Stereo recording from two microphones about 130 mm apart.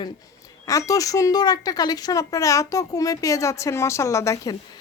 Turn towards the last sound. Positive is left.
turn(degrees=25)  # may be behind; listen again after turning